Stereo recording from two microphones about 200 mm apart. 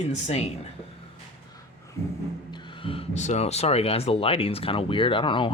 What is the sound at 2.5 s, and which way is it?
Speech, 25° left (ahead or behind).